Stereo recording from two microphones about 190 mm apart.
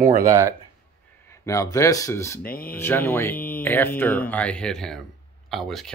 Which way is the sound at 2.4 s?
50° left (ahead or behind).